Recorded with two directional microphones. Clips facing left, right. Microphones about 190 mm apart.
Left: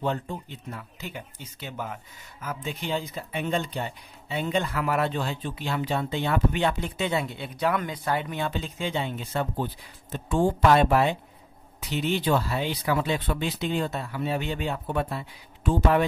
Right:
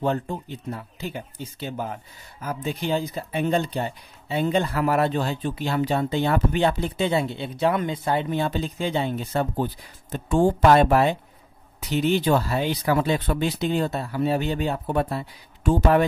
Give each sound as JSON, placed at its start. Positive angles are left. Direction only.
{"t": 0.0, "sound": "speech", "side_deg": -40}